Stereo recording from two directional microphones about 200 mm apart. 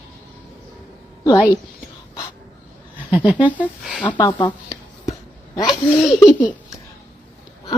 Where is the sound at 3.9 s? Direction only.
5° left (ahead or behind).